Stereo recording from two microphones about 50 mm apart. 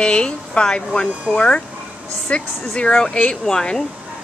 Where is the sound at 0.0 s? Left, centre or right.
Left.